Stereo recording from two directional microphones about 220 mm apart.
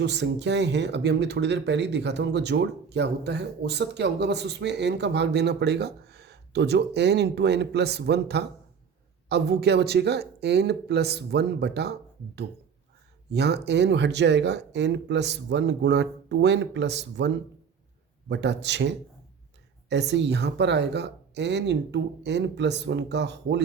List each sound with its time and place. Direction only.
0.0 s speech: 50° right (ahead or behind)
13.3 s speech: 50° right (ahead or behind)